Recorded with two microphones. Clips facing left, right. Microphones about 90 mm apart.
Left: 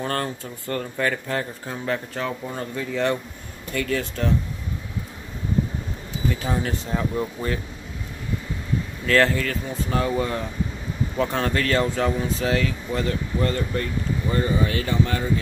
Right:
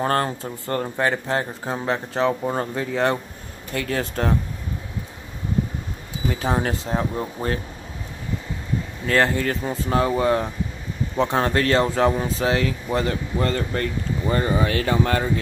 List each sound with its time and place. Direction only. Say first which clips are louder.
0.0 s speech: right 5 dB; 35° right (ahead or behind)
2.5 s speech: right 3 dB; 45° right (ahead or behind)
6.4 s speech: right 3 dB; 45° right (ahead or behind)
9.0 s speech: left 1 dB; 20° right (ahead or behind)
9.4 s speech: right 3 dB; 35° right (ahead or behind)
14.3 s speech: right 2 dB; 55° right (ahead or behind)